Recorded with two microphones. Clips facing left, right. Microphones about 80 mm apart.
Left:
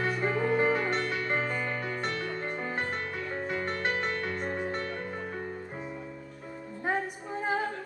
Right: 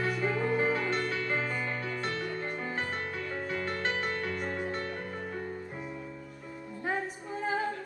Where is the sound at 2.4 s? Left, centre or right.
Left.